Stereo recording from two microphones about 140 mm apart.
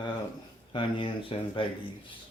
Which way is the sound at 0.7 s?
40° left (ahead or behind).